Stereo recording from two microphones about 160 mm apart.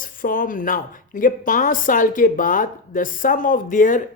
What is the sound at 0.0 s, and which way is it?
A woman's voice, 60° left (ahead or behind).